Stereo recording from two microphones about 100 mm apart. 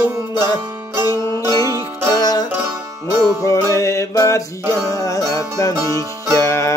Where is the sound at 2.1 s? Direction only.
40° left (ahead or behind).